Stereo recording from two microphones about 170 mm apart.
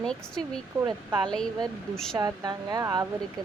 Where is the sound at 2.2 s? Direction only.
25° right (ahead or behind).